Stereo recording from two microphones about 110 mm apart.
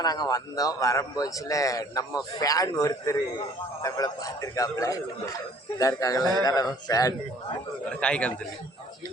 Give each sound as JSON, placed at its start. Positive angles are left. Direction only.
{"t": 0.0, "sound": "a man's voice", "side_deg": 35}
{"t": 7.9, "sound": "a man's voice", "side_deg": 10}